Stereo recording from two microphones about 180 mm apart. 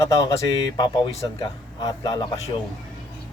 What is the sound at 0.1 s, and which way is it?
Speech, 20° left (ahead or behind).